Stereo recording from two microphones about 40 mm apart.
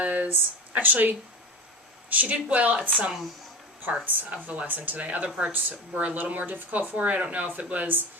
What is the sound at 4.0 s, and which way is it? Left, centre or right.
Speech, right.